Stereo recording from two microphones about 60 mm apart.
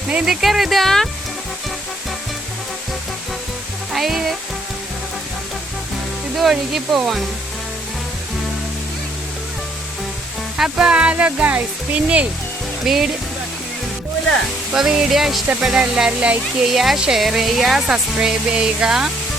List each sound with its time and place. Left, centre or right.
0.3 s speech: centre
3.9 s music: centre
6.3 s speech: centre
10.6 s speech: centre
12.8 s music: centre
14.8 s speech: centre
16.7 s speech: centre